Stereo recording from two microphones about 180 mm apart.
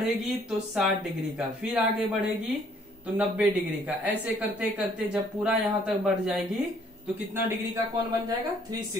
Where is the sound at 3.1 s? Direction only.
5° right (ahead or behind).